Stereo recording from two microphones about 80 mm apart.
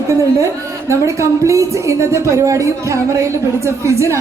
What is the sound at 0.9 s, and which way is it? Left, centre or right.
A woman's voice, right.